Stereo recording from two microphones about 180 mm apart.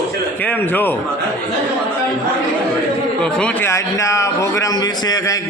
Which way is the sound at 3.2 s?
5° left (ahead or behind).